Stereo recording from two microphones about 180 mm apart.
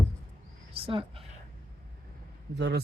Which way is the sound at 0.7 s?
30° right (ahead or behind).